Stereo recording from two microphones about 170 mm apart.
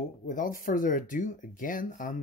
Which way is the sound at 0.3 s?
55° left (ahead or behind).